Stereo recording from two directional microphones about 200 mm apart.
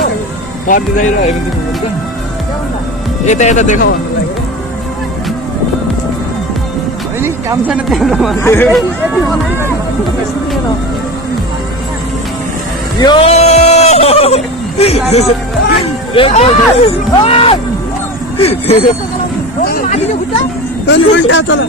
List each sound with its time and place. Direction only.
0.7 s speech: 40° left (ahead or behind)
3.3 s speech: 35° left (ahead or behind)
7.2 s speech: 10° right (ahead or behind)
8.4 s speech: 10° left (ahead or behind)
13.0 s speech: 25° left (ahead or behind)
16.2 s speech: 30° left (ahead or behind)
20.8 s a man's voice: 65° left (ahead or behind)